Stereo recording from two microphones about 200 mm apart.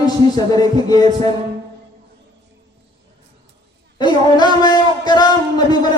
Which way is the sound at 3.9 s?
20° left (ahead or behind).